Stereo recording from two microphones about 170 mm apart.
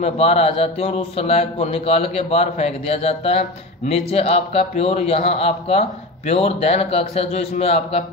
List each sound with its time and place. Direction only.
0.0 s a man's voice: 35° left (ahead or behind)